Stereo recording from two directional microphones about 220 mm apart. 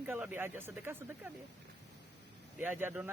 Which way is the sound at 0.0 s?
10° right (ahead or behind).